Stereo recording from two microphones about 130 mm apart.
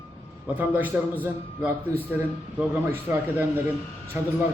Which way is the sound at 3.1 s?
15° right (ahead or behind).